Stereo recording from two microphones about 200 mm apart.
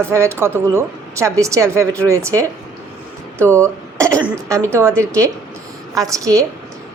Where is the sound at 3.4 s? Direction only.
15° right (ahead or behind).